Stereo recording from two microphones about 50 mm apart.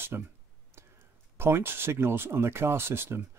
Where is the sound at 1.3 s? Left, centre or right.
Right.